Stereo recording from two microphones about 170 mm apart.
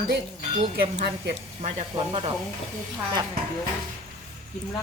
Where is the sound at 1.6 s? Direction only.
35° right (ahead or behind).